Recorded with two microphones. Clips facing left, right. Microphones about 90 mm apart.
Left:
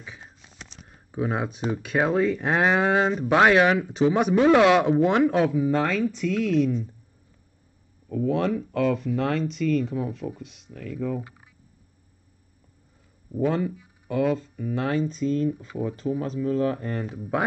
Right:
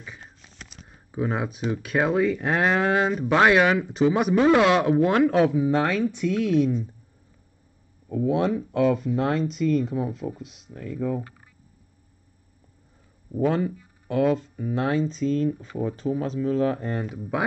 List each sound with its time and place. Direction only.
0.0 s a sound: 5° left (ahead or behind)
1.7 s speech: centre (ahead or behind)
5.4 s speech: 15° right (ahead or behind)
8.1 s speech: 15° right (ahead or behind)
10.7 s speech: 15° right (ahead or behind)
13.5 s speech: 5° right (ahead or behind)
13.7 s a sound: centre (ahead or behind)
14.6 s speech: 20° right (ahead or behind)
15.0 s speech: 5° left (ahead or behind)
16.0 s speech: 10° right (ahead or behind)
17.2 s speech: centre (ahead or behind)